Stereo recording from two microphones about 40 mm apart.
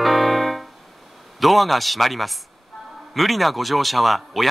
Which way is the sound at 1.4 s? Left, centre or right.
Centre.